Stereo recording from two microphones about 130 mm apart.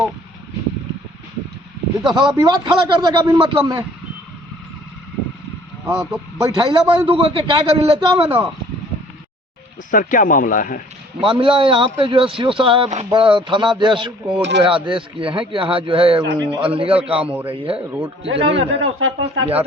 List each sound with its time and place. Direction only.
2.0 s speech: 35° right (ahead or behind)
5.9 s a man's voice: 5° right (ahead or behind)
6.4 s speech: 35° right (ahead or behind)
9.9 s speech: 90° left
11.2 s speech: 40° right (ahead or behind)
17.2 s a man's voice: 10° right (ahead or behind)
17.5 s a man's voice: 45° right (ahead or behind)